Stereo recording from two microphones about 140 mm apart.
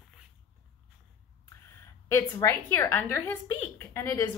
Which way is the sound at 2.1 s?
25° left (ahead or behind).